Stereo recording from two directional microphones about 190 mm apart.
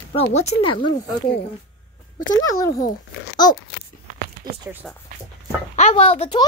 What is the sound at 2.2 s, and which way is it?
Speech, 20° left (ahead or behind).